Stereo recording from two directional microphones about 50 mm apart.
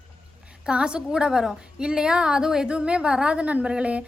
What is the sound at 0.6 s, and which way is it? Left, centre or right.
A woman's voice, centre.